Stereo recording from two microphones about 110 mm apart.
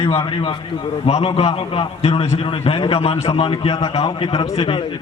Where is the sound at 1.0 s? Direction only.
65° left (ahead or behind).